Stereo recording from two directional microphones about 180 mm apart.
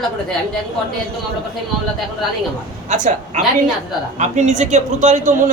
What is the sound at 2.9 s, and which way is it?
Speech, 45° right (ahead or behind).